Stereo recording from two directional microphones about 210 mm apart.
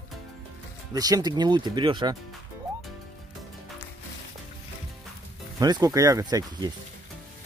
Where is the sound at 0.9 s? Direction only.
20° right (ahead or behind).